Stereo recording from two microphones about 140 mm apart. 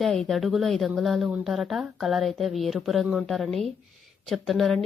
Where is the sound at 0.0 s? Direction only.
Centre (ahead or behind).